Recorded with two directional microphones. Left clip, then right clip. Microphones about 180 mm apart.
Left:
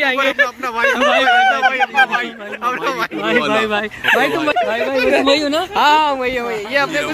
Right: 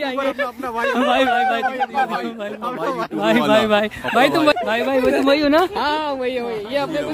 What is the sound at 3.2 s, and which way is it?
Speech, 55° right (ahead or behind).